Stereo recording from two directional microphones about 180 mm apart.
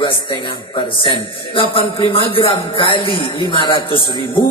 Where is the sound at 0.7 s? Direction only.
25° left (ahead or behind).